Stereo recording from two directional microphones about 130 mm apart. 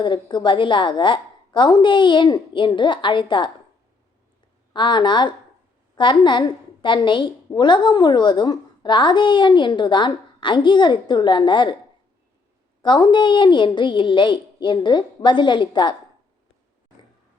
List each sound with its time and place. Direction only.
0.0 s a woman's voice: 35° left (ahead or behind)
4.7 s a woman's voice: 35° left (ahead or behind)
12.8 s a woman's voice: 35° left (ahead or behind)